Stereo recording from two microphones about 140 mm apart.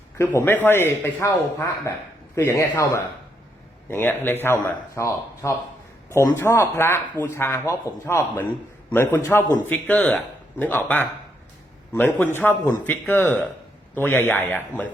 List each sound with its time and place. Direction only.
0.2 s a man's voice: 15° left (ahead or behind)